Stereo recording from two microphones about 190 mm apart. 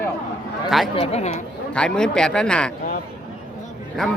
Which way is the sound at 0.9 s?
30° left (ahead or behind).